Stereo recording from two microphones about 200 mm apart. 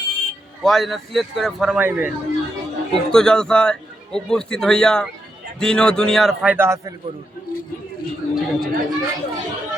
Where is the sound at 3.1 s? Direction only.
5° left (ahead or behind).